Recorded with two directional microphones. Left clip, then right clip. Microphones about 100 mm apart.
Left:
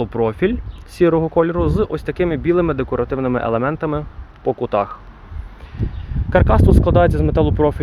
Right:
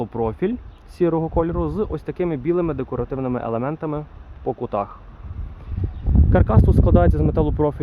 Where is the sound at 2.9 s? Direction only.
25° left (ahead or behind); by 4.9 s 10° left (ahead or behind).